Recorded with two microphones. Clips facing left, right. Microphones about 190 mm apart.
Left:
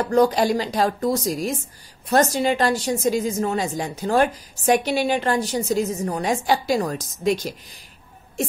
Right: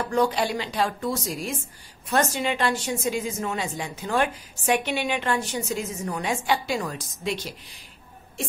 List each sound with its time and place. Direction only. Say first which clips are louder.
0.1 s a woman's voice: left 6 dB; 40° left (ahead or behind)